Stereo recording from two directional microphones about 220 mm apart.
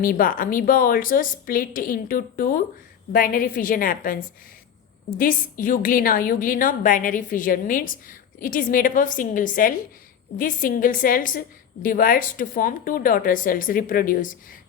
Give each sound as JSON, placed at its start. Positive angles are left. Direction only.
{"t": 0.0, "sound": "a woman's voice", "side_deg": 40}